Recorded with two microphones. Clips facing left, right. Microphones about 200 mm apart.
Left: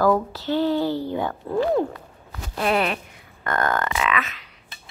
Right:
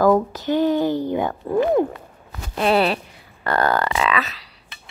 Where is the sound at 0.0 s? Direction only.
15° right (ahead or behind).